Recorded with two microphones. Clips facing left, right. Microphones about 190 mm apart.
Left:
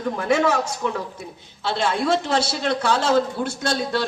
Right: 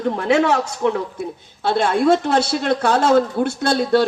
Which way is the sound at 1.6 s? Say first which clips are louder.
Right 6 dB; 55° right (ahead or behind).